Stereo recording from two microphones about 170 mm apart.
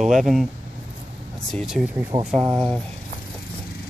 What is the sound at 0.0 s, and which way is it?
Speech, centre (ahead or behind).